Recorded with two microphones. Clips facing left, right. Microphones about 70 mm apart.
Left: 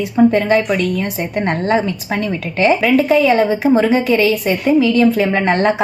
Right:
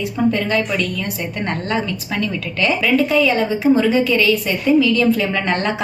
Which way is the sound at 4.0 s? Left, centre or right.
Left.